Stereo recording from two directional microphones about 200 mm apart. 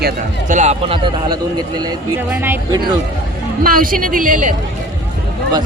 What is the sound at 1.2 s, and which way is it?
Speech, 20° right (ahead or behind).